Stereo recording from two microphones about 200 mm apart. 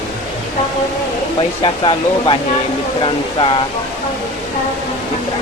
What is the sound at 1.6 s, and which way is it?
Speech, 25° left (ahead or behind).